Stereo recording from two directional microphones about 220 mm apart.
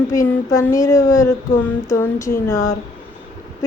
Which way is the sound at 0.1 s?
15° left (ahead or behind).